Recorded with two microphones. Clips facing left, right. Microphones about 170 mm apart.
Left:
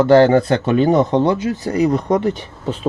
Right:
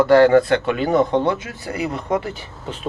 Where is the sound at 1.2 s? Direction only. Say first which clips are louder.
Left 5 dB; 35° left (ahead or behind).